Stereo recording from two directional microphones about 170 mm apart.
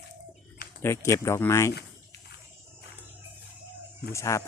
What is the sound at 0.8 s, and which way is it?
Speech, 15° left (ahead or behind).